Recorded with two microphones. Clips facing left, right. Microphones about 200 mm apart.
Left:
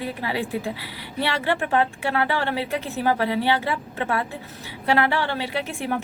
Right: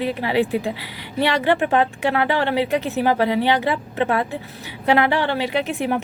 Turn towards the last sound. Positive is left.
turn(degrees=-20)  # may be behind; listen again after turning